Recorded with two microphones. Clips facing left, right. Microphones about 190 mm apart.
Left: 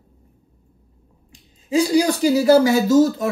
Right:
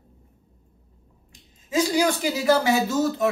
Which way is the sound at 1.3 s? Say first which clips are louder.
Left 8 dB; 30° left (ahead or behind).